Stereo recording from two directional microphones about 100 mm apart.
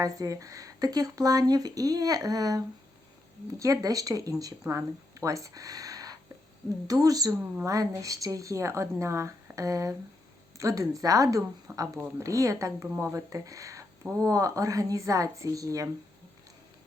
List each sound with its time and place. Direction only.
0.0 s speech: 35° right (ahead or behind)